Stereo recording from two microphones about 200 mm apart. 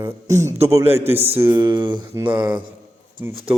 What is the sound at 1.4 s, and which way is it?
Speech, 10° right (ahead or behind).